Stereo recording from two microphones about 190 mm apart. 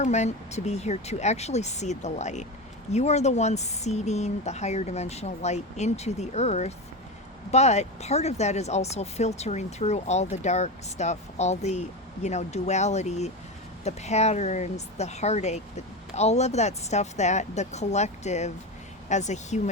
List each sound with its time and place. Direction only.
0.0 s speech: 35° left (ahead or behind)